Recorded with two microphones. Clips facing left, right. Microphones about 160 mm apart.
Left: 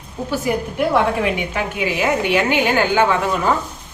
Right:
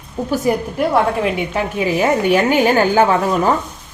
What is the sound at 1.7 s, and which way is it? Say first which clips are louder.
A woman's voice: right 4 dB; 35° right (ahead or behind).